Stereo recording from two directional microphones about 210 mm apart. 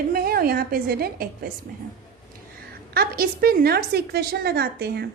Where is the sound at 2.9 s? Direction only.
45° right (ahead or behind).